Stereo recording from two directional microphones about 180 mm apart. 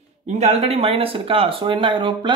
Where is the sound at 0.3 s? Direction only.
40° right (ahead or behind).